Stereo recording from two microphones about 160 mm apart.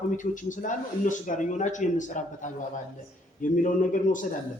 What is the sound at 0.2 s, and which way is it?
A man's voice, 55° left (ahead or behind).